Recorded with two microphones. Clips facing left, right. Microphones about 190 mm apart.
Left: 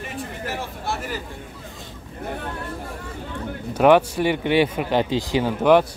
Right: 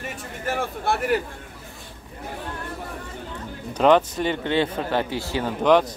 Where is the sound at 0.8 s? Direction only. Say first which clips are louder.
Right 7 dB; 60° right (ahead or behind).